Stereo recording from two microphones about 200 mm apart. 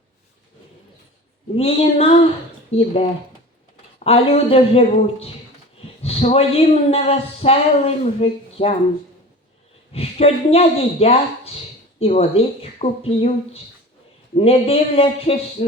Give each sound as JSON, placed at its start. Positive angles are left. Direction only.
{"t": 1.5, "sound": "speech", "side_deg": 30}
{"t": 9.9, "sound": "speech", "side_deg": 30}